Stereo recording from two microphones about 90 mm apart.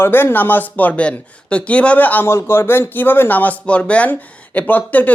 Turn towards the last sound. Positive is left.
turn(degrees=20)  # may be behind; listen again after turning